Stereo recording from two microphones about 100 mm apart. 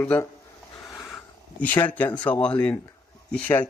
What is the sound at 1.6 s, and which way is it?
Speech, 15° left (ahead or behind).